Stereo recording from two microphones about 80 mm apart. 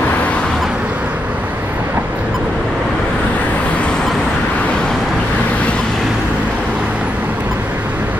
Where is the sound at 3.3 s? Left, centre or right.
Centre.